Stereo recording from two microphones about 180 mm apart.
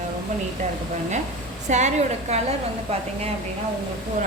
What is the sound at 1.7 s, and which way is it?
Speech, 40° right (ahead or behind).